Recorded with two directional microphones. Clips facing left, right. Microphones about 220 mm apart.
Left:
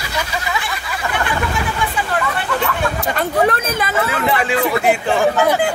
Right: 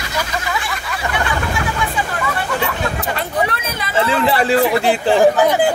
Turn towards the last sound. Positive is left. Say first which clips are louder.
# right 2 dB
turn(degrees=-35)  # may be behind; listen again after turning